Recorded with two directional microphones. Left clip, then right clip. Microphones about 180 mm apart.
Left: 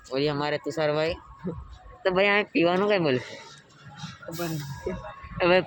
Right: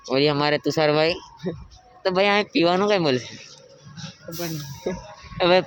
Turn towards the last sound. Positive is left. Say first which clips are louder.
# right 3 dB
turn(degrees=-15)  # may be behind; listen again after turning